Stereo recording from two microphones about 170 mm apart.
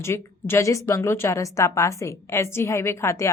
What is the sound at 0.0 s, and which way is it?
A woman's voice, 15° left (ahead or behind).